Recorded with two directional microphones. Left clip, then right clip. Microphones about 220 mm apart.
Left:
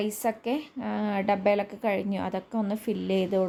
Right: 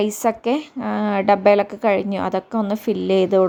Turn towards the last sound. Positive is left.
turn(degrees=-20)  # may be behind; listen again after turning